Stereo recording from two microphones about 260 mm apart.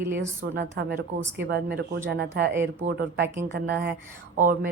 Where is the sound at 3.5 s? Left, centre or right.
Right.